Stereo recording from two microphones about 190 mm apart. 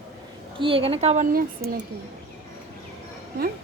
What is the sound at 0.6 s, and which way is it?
A woman's voice, 30° right (ahead or behind).